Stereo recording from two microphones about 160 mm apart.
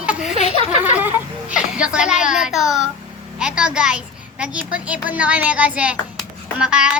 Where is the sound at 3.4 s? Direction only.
5° right (ahead or behind).